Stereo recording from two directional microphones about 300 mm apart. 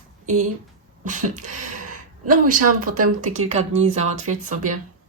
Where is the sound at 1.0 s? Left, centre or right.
Right.